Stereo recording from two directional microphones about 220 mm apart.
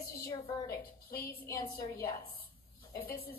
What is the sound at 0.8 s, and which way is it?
Speech, 40° left (ahead or behind).